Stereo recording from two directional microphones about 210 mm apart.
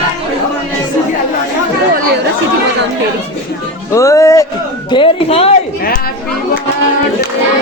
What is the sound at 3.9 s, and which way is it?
Music, 15° left (ahead or behind).